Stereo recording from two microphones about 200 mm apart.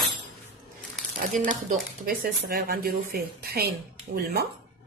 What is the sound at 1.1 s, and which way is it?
Speech, 45° right (ahead or behind).